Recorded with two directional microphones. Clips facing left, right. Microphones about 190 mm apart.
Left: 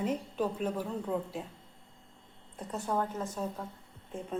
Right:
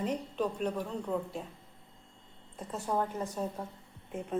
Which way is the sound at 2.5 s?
Centre (ahead or behind).